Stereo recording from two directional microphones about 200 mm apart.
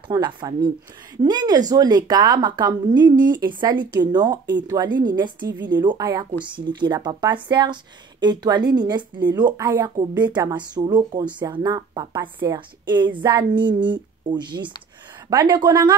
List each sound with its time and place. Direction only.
0.1 s speech: 20° right (ahead or behind)